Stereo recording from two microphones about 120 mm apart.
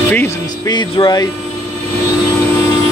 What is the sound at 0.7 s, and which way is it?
Speech, 40° left (ahead or behind).